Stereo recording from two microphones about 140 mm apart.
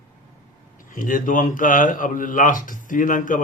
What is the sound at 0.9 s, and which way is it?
A man's voice, 70° left (ahead or behind).